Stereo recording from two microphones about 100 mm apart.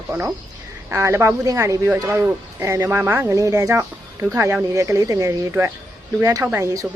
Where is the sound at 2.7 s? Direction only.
30° right (ahead or behind).